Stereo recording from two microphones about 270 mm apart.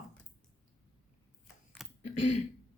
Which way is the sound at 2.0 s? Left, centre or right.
Left.